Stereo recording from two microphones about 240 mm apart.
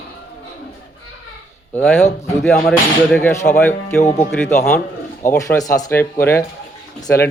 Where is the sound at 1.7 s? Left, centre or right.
Centre.